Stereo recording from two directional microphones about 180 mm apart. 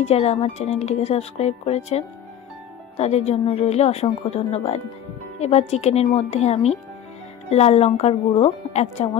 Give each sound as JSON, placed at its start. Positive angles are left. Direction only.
{"t": 0.0, "sound": "speech", "side_deg": 35}